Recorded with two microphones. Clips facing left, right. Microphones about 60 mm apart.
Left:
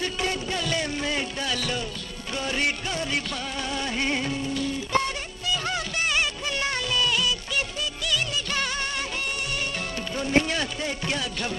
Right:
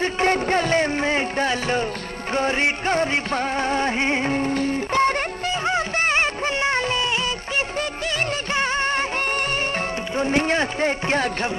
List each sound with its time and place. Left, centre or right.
0.0 s music: right
8.5 s music: right
10.1 s speech: right